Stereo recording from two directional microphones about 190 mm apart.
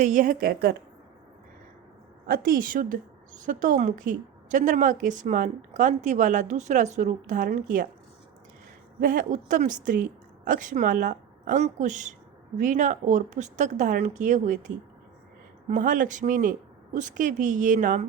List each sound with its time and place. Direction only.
0.0 s a woman's voice: 40° right (ahead or behind)
2.2 s a woman's voice: 50° right (ahead or behind)
9.0 s a woman's voice: 45° right (ahead or behind)
15.7 s a woman's voice: 45° right (ahead or behind)